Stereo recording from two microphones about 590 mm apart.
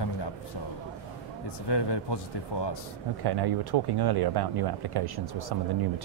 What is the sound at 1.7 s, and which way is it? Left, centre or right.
A man's voice, left.